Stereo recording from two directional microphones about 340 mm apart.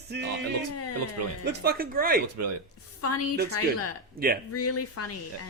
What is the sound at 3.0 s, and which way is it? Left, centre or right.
Speech, left.